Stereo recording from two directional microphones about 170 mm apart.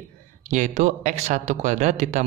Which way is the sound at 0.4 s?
45° right (ahead or behind).